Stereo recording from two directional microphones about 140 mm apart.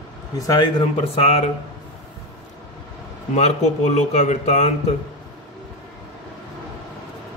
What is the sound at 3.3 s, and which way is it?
Speech, 55° left (ahead or behind).